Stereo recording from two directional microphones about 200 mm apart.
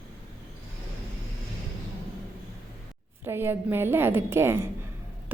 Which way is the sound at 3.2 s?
10° right (ahead or behind).